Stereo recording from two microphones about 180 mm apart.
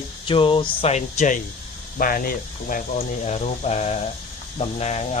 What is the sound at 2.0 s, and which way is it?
Speech, 50° left (ahead or behind).